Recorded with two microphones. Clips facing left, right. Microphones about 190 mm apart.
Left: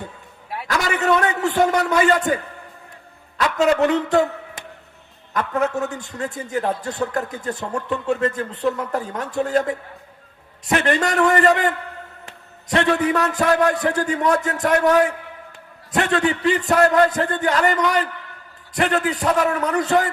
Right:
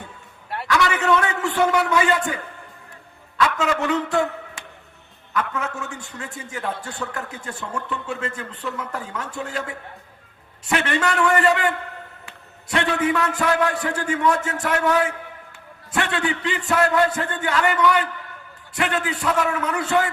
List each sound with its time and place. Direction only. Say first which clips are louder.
0.7 s a man's voice: even; 40° left (ahead or behind)
12.7 s a man's voice: left 3 dB; 40° left (ahead or behind)